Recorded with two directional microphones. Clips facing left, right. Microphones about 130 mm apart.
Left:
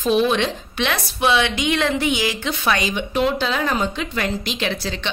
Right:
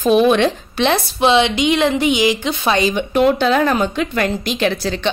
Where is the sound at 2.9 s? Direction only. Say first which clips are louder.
Right 6 dB; 55° right (ahead or behind).